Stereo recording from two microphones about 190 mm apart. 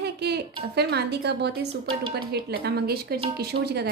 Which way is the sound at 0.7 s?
60° right (ahead or behind).